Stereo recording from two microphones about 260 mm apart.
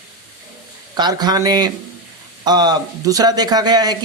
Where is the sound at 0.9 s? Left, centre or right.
Centre.